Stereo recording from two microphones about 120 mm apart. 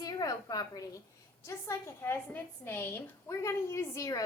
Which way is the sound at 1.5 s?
20° left (ahead or behind).